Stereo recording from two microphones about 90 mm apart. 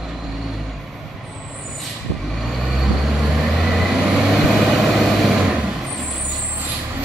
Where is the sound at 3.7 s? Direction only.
Centre (ahead or behind).